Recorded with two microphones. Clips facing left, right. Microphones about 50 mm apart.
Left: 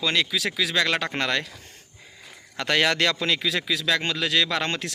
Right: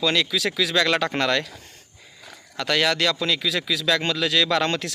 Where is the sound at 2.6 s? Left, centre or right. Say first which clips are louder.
Even; left.